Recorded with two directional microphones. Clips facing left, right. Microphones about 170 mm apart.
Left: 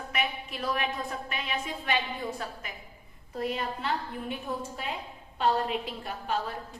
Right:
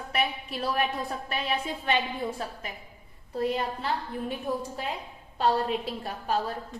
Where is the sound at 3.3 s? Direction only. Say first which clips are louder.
Right 4 dB; 35° right (ahead or behind).